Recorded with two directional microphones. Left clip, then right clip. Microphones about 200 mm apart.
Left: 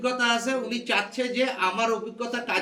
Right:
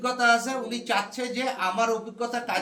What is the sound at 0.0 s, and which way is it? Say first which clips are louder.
Speech: right 2 dB; 20° right (ahead or behind).